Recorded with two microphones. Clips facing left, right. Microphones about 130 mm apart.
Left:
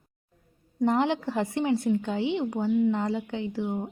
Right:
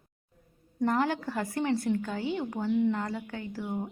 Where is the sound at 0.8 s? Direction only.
20° left (ahead or behind).